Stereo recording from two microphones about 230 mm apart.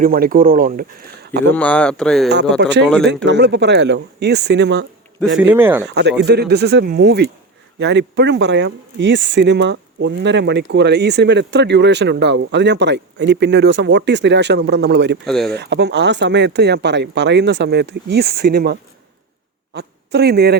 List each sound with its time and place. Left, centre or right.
0.0 s speech: right
1.5 s speech: centre
2.6 s speech: right
5.4 s speech: centre
5.8 s speech: right
15.2 s speech: centre
15.4 s speech: right